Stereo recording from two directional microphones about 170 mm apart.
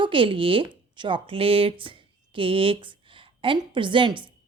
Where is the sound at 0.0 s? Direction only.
30° right (ahead or behind).